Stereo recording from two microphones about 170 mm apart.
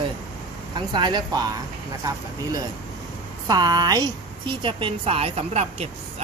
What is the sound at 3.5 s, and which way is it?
A woman's voice, 25° right (ahead or behind).